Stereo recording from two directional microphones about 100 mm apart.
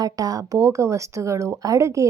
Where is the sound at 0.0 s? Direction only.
40° right (ahead or behind).